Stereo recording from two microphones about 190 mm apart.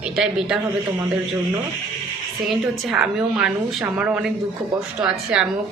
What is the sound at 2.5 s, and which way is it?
A woman's voice, centre (ahead or behind).